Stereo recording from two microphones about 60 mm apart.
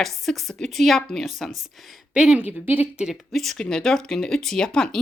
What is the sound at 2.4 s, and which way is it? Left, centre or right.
Speech, right.